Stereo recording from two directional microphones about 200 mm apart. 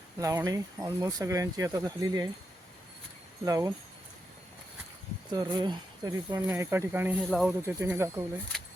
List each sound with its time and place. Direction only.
0.2 s speech: 15° right (ahead or behind)
3.4 s speech: 15° right (ahead or behind)
5.3 s speech: 20° right (ahead or behind)
7.2 s speech: centre (ahead or behind)
7.6 s speech: 15° right (ahead or behind)